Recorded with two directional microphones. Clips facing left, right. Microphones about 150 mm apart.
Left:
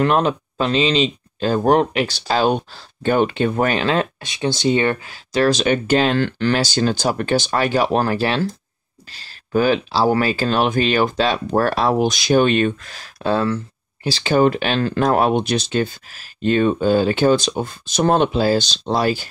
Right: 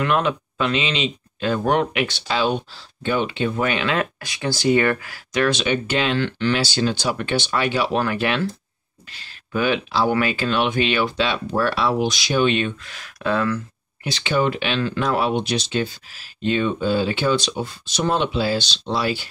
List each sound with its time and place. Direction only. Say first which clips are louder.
0.0 s speech: left 4 dB; 35° left (ahead or behind)